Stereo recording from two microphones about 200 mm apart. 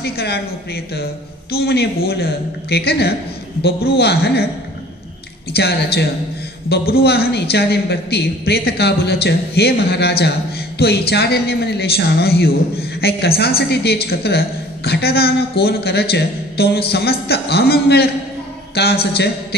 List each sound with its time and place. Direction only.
0.0 s a man's voice: 55° left (ahead or behind)
5.5 s a man's voice: 55° left (ahead or behind)